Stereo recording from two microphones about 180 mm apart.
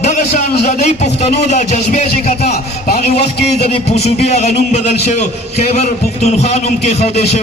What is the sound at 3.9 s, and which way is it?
A man's voice, 35° left (ahead or behind).